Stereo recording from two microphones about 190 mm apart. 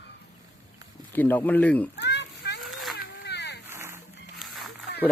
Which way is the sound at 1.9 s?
65° left (ahead or behind).